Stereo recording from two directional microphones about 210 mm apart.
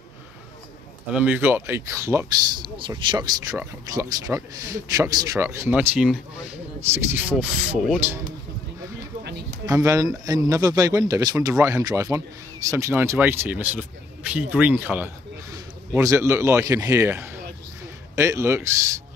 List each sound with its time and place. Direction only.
1.1 s speech: 10° right (ahead or behind)
9.2 s a sound: 50° right (ahead or behind)
9.7 s speech: 15° right (ahead or behind)